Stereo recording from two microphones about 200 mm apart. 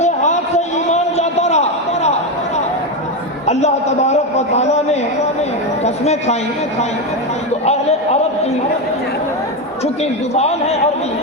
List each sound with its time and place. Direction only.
0.0 s a sound: 35° left (ahead or behind)
3.4 s a man's voice: 35° left (ahead or behind)
7.6 s speech: 30° left (ahead or behind)
9.8 s speech: 30° left (ahead or behind)